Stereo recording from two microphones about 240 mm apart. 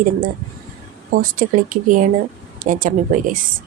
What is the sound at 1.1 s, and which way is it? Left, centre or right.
Speech, right.